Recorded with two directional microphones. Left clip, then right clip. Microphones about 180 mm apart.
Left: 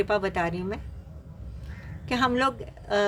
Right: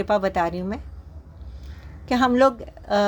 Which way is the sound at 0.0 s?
20° right (ahead or behind).